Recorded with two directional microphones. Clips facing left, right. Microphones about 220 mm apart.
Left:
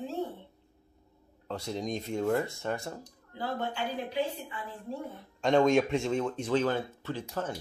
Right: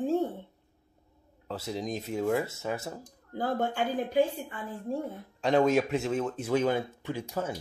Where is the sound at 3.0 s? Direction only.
50° right (ahead or behind).